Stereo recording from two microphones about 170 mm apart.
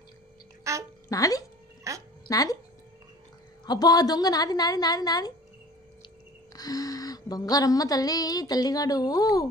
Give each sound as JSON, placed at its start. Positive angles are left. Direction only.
{"t": 0.7, "sound": "music", "side_deg": -20}
{"t": 1.0, "sound": "speech", "side_deg": 20}
{"t": 1.9, "sound": "music", "side_deg": -20}
{"t": 2.2, "sound": "speech", "side_deg": 20}
{"t": 3.6, "sound": "speech", "side_deg": 25}
{"t": 6.5, "sound": "speech", "side_deg": 20}